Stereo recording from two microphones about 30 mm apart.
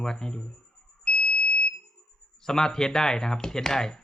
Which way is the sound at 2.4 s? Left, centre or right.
Centre.